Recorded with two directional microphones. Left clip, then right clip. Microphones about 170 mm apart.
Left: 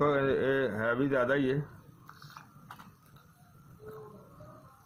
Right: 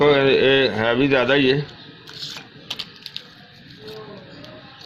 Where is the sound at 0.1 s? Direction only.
45° right (ahead or behind).